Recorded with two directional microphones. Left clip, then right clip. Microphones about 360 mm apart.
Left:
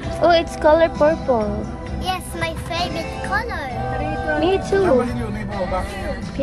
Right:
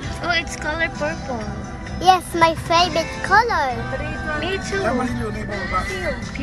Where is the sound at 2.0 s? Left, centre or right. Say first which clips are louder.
Right 10 dB; centre.